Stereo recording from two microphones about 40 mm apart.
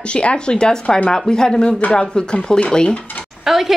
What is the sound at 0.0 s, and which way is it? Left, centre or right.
Speech, left.